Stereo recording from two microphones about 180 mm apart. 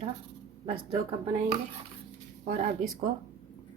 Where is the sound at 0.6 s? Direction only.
35° right (ahead or behind).